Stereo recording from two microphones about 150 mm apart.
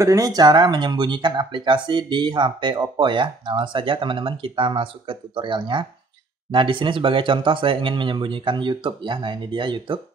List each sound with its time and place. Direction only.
0.0 s speech: 20° right (ahead or behind)